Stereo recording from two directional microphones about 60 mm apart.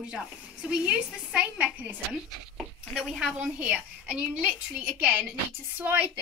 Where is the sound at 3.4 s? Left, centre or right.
Right.